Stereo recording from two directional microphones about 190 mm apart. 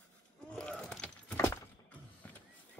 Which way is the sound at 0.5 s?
5° left (ahead or behind).